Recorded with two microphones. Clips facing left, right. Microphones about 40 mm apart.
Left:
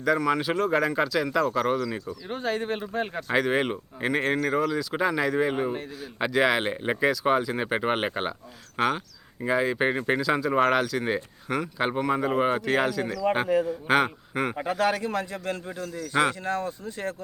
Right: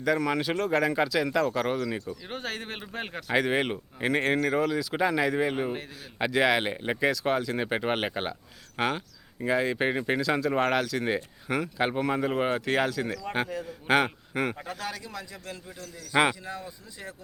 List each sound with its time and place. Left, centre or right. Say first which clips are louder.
0.0 s speech: left 2 dB; centre
5.6 s speech: left 2 dB; centre
6.0 s speech: left 1 dB; centre
14.8 s a man's voice: left 11 dB; left
16.4 s speech: left 9 dB; left